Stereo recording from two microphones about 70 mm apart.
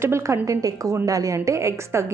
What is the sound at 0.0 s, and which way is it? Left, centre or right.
A woman's voice, right.